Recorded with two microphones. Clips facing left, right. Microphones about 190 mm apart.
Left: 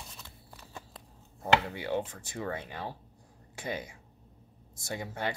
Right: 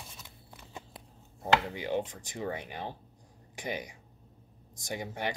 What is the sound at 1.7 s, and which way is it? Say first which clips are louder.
Speech: even; 15° right (ahead or behind).